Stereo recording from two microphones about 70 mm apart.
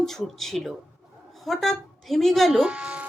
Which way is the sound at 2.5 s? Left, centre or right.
Centre.